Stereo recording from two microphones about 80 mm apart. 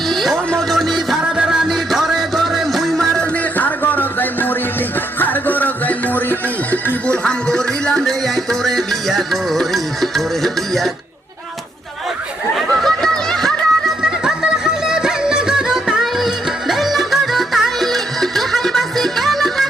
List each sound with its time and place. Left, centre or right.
0.1 s a sound: centre
0.7 s music: centre
3.3 s music: left
7.3 s music: centre
12.5 s chatter: centre
14.0 s music: centre